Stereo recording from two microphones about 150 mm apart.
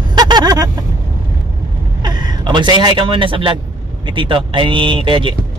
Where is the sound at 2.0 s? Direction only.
30° right (ahead or behind).